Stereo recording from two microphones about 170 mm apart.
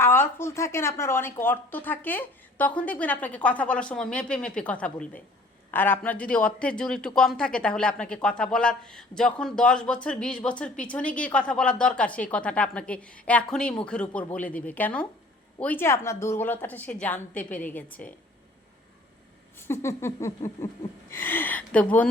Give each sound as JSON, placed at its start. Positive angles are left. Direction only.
{"t": 0.0, "sound": "speech", "side_deg": 15}
{"t": 19.5, "sound": "speech", "side_deg": 15}